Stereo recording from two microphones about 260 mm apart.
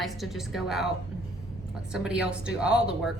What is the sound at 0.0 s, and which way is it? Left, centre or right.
Speech, centre.